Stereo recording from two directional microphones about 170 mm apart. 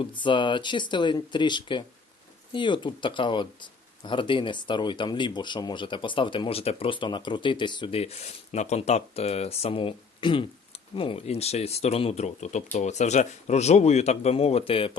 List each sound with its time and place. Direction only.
0.0 s speech: 30° left (ahead or behind)